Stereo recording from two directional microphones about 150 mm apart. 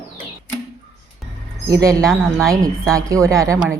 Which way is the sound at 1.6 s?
20° right (ahead or behind).